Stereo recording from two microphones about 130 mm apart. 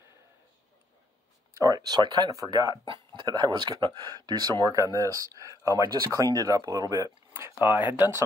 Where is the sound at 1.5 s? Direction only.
25° right (ahead or behind).